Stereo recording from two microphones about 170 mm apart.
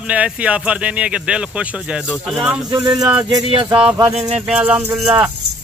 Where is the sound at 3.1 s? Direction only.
25° right (ahead or behind).